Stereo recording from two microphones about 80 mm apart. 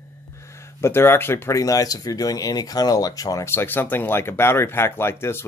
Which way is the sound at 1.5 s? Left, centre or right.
Left.